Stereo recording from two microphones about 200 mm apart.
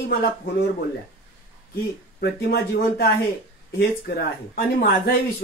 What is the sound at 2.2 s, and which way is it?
Speech, 55° left (ahead or behind).